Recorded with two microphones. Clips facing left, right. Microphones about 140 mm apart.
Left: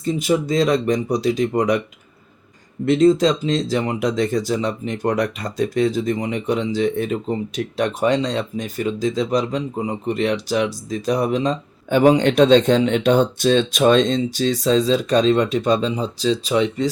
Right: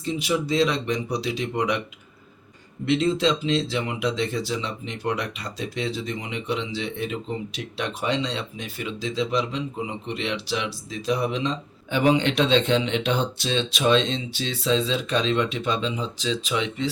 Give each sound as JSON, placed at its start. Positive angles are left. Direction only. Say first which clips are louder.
{"t": 0.0, "sound": "speech", "louder": "left 6 dB", "side_deg": 45}
{"t": 2.8, "sound": "speech", "louder": "left 7 dB", "side_deg": 40}